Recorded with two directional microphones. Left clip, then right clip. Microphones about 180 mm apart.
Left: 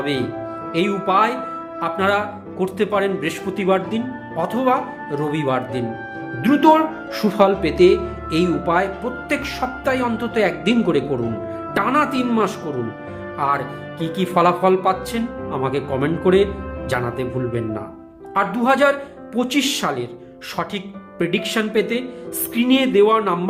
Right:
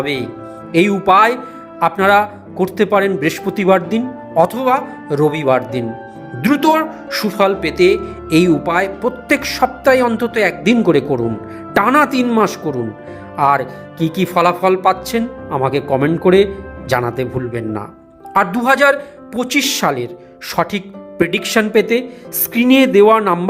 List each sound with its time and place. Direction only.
0.0 s speech: 35° right (ahead or behind)